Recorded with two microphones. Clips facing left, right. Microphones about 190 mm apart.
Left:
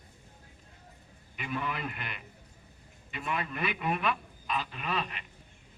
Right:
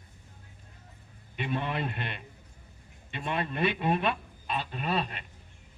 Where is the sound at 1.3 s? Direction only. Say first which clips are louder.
Right 4 dB; 30° right (ahead or behind).